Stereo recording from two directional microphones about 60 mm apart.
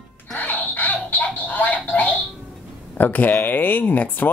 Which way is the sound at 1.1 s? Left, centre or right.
Left.